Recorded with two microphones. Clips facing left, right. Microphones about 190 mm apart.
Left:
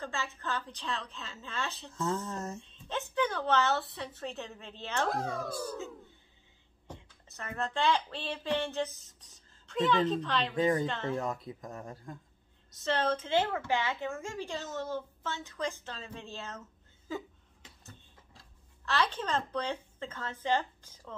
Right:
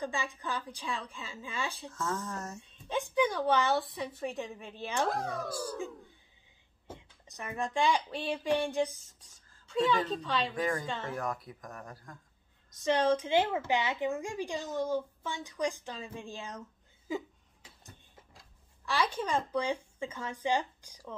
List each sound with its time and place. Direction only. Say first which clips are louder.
0.0 s a woman's voice: right 2 dB; 15° right (ahead or behind)
2.0 s speech: left 3 dB; 20° left (ahead or behind)
2.6 s a woman's voice: right 3 dB; 10° right (ahead or behind)
5.0 s speech: left 1 dB; centre (ahead or behind)
7.0 s a woman's voice: right 1 dB; 15° right (ahead or behind)
10.5 s speech: left 4 dB; 20° left (ahead or behind)
12.8 s a woman's voice: right 3 dB; 10° right (ahead or behind)
18.9 s a woman's voice: even; 10° right (ahead or behind)